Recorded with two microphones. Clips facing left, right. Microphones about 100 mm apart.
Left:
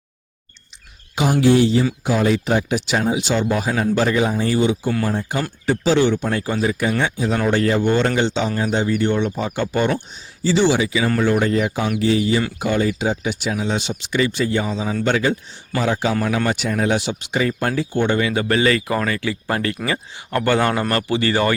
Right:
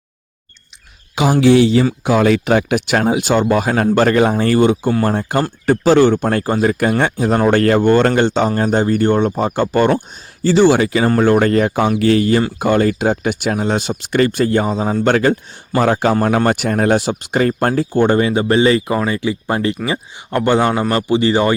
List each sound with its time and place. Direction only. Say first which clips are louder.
1.1 s speech: right 4 dB; 90° right
2.0 s speech: right 6 dB; 75° right (ahead or behind); by 21.5 s 20° right (ahead or behind)